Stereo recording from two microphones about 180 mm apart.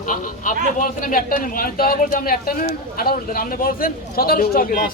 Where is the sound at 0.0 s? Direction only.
45° left (ahead or behind).